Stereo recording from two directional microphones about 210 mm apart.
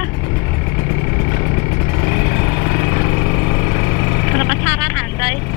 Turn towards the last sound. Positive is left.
turn(degrees=10)  # may be behind; listen again after turning